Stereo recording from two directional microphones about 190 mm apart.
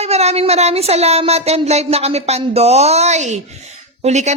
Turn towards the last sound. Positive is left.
turn(degrees=-35)  # may be behind; listen again after turning